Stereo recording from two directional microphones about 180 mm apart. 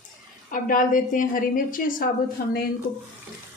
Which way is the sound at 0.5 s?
50° left (ahead or behind).